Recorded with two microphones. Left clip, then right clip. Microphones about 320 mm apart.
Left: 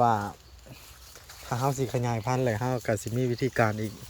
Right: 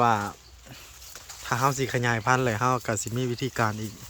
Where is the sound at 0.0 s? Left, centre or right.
Centre.